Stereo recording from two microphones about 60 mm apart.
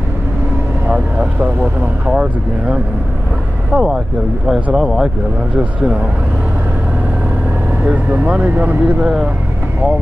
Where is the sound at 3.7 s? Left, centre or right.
Centre.